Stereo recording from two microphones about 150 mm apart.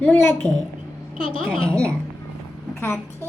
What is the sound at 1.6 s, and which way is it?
Speech, 5° left (ahead or behind).